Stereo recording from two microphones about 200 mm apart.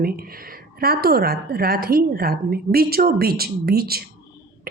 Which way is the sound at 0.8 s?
50° right (ahead or behind).